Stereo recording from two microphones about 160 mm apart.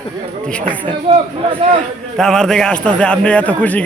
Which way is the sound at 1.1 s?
35° right (ahead or behind).